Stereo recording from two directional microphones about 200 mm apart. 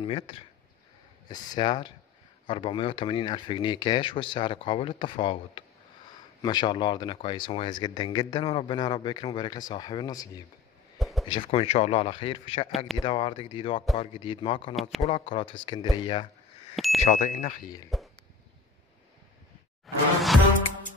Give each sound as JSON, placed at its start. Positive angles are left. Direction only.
{"t": 0.0, "sound": "speech", "side_deg": 25}
{"t": 11.0, "sound": "a sound", "side_deg": 0}
{"t": 11.2, "sound": "speech", "side_deg": 25}
{"t": 14.8, "sound": "speech", "side_deg": 0}
{"t": 15.0, "sound": "speech", "side_deg": 30}
{"t": 16.7, "sound": "a sound", "side_deg": 0}
{"t": 17.0, "sound": "speech", "side_deg": 35}
{"t": 19.9, "sound": "music", "side_deg": 0}